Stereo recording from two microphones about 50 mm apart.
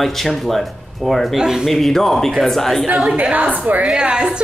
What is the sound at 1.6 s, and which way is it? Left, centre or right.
A woman's voice, centre.